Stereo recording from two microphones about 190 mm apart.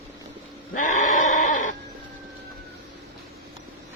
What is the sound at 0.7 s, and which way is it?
Goat, 40° left (ahead or behind).